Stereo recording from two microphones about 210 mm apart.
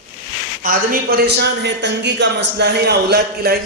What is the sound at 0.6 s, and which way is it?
A man's voice, 45° right (ahead or behind).